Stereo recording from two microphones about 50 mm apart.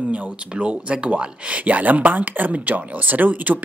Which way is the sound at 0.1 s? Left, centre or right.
Right.